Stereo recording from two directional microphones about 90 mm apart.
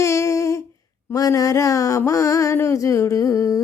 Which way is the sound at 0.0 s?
35° left (ahead or behind).